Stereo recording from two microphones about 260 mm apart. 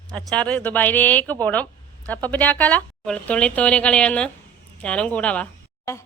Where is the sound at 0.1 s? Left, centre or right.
Centre.